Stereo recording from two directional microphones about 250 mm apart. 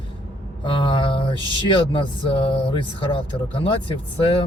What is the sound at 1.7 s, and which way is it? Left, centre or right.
Speech, centre.